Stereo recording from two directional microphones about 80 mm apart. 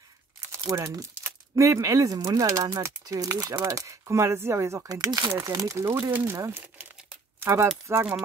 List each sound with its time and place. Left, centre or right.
0.7 s speech: right
4.8 s speech: right
5.3 s speech: right
7.9 s speech: centre